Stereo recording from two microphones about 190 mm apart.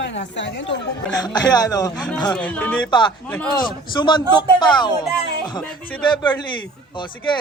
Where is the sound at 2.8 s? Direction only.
25° left (ahead or behind).